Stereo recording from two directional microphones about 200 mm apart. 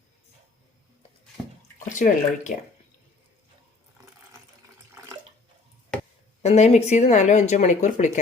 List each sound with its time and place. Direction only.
1.9 s speech: 40° left (ahead or behind)
6.4 s speech: 30° left (ahead or behind)